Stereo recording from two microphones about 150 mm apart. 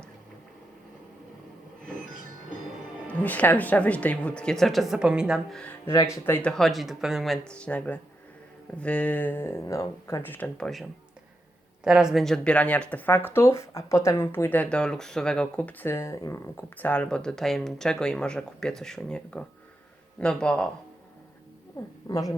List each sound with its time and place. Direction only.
3.1 s speech: 10° left (ahead or behind)
5.8 s speech: 20° left (ahead or behind)
11.8 s speech: 5° right (ahead or behind)
22.1 s speech: 20° left (ahead or behind)